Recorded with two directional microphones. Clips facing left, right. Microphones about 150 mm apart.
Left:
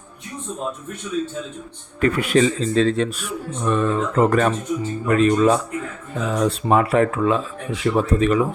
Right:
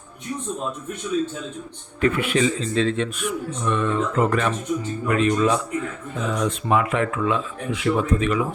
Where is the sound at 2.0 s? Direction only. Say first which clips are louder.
Left 3 dB; 40° left (ahead or behind).